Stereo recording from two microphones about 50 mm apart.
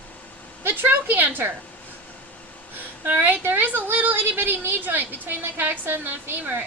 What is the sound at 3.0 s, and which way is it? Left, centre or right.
A woman's voice, right.